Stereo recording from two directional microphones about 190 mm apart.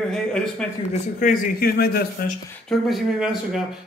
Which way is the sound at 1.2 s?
45° left (ahead or behind).